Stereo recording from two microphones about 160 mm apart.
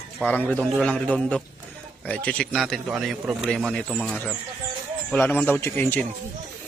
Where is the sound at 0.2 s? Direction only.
10° left (ahead or behind).